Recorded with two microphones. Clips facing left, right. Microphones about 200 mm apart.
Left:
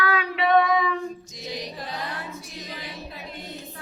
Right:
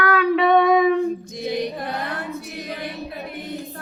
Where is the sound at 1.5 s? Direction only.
60° right (ahead or behind).